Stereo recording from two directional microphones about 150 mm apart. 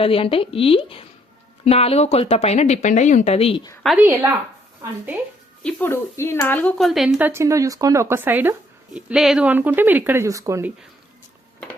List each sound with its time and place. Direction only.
0.0 s a woman's voice: 40° left (ahead or behind)
4.0 s speech: 15° right (ahead or behind)
5.6 s speech: 15° left (ahead or behind)
6.7 s speech: centre (ahead or behind); by 10.7 s 20° right (ahead or behind)